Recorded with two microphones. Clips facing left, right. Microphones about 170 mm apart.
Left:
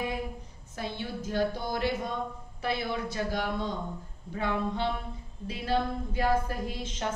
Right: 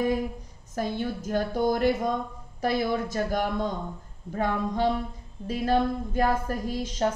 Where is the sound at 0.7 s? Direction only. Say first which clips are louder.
Right 6 dB; 45° right (ahead or behind).